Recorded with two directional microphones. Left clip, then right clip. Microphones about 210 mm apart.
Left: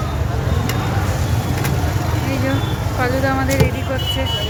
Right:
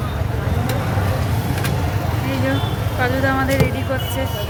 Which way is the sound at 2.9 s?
Centre (ahead or behind).